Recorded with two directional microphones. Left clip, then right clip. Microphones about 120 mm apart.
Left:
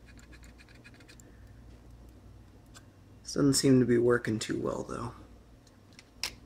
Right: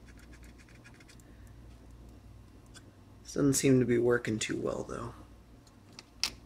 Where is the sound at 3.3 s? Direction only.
20° left (ahead or behind).